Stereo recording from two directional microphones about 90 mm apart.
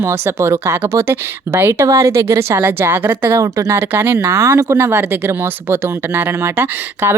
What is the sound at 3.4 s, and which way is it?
A woman's voice, 35° right (ahead or behind).